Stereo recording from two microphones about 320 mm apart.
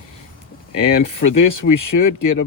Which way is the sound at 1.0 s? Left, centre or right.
Left.